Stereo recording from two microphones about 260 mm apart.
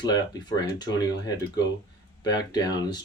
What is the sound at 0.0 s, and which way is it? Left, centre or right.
Speech, centre.